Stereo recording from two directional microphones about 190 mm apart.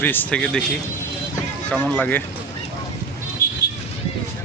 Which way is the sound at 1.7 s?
10° left (ahead or behind).